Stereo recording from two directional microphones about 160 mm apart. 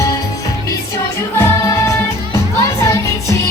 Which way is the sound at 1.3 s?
20° left (ahead or behind).